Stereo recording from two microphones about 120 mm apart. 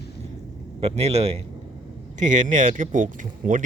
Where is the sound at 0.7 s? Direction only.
55° right (ahead or behind).